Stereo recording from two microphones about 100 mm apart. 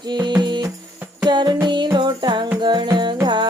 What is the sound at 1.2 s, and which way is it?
Music, 45° right (ahead or behind).